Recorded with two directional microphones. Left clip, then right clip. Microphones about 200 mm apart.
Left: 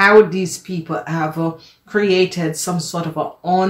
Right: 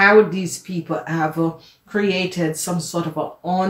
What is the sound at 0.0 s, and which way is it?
Speech, 20° left (ahead or behind).